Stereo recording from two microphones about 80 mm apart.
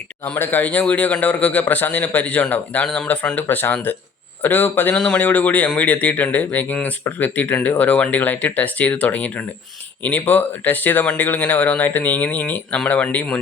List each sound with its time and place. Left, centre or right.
0.3 s speech: left
4.9 s a man's voice: centre